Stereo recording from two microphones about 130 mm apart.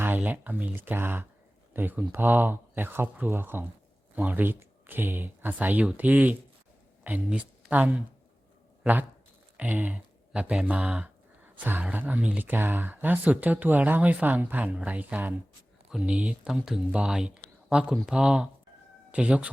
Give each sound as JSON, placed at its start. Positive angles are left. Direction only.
{"t": 0.0, "sound": "speech", "side_deg": -15}
{"t": 9.6, "sound": "a sound", "side_deg": -10}
{"t": 11.6, "sound": "speech", "side_deg": -15}